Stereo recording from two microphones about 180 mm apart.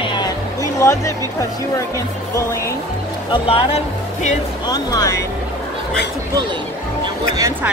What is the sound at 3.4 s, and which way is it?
Speech, 35° left (ahead or behind).